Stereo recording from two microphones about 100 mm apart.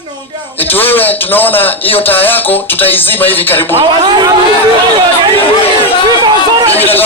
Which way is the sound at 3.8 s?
50° right (ahead or behind).